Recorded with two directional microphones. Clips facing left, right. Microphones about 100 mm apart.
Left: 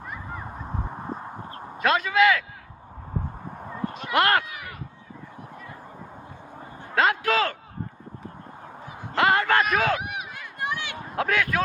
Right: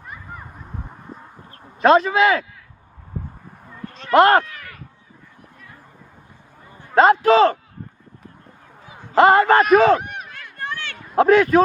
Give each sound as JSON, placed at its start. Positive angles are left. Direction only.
{"t": 1.8, "sound": "a man's voice", "side_deg": -35}
{"t": 4.1, "sound": "a man's voice", "side_deg": -35}
{"t": 6.9, "sound": "a man's voice", "side_deg": -35}
{"t": 9.1, "sound": "a man's voice", "side_deg": -35}
{"t": 10.0, "sound": "run", "side_deg": 5}
{"t": 11.2, "sound": "a man's voice", "side_deg": -35}